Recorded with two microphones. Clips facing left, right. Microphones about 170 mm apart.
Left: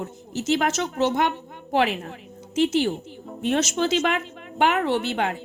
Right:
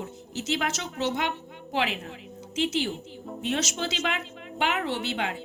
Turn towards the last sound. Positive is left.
turn(degrees=50)  # may be behind; listen again after turning